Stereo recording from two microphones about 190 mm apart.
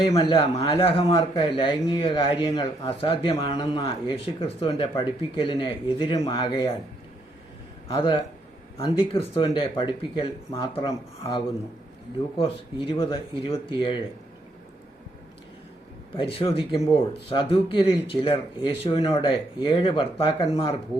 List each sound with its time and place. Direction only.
0.1 s a man's voice: 30° left (ahead or behind)
7.9 s speech: 25° left (ahead or behind)
16.1 s speech: 30° left (ahead or behind)